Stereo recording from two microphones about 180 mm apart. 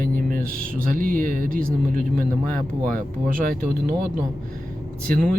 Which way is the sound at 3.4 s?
55° right (ahead or behind).